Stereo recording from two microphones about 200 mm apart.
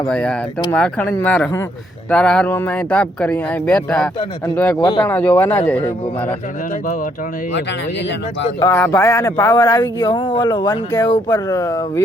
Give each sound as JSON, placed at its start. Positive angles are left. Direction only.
{"t": 0.1, "sound": "speech", "side_deg": 5}
{"t": 4.8, "sound": "speech", "side_deg": 20}
{"t": 5.0, "sound": "speech", "side_deg": 10}
{"t": 8.6, "sound": "speech", "side_deg": 15}